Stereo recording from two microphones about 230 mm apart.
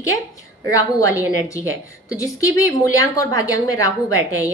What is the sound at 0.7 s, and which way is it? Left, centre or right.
A woman's voice, centre.